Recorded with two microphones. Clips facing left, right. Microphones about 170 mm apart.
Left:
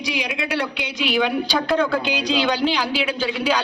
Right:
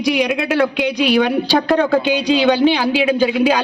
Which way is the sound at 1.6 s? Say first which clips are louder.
Right 4 dB; 55° right (ahead or behind).